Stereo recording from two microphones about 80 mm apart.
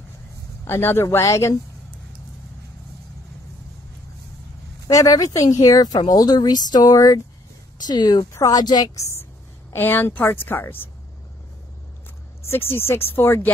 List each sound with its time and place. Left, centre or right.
0.7 s speech: left
4.8 s speech: left
8.3 s speech: left
8.9 s speech: left
9.7 s a woman's voice: left
12.4 s a woman's voice: left